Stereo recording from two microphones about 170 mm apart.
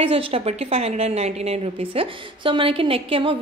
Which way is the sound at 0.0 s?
35° right (ahead or behind).